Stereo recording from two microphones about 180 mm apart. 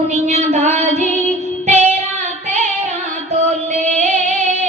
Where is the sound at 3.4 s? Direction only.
40° right (ahead or behind).